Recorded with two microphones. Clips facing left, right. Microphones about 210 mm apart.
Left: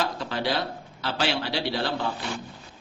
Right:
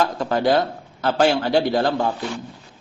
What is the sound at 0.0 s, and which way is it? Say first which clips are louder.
A man's voice: right 8 dB; 50° right (ahead or behind).